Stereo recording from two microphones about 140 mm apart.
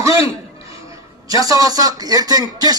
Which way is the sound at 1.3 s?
25° right (ahead or behind).